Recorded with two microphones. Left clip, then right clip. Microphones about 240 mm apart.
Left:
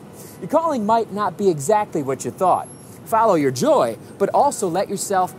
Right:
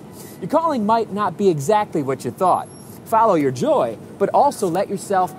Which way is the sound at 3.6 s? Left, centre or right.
Left.